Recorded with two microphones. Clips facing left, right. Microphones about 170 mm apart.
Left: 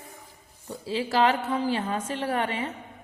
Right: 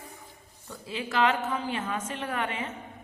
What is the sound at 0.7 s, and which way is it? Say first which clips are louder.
A woman's voice: left 6 dB; 30° left (ahead or behind).